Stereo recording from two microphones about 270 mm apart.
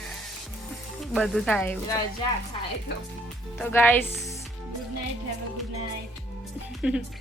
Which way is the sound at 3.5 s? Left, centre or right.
Centre.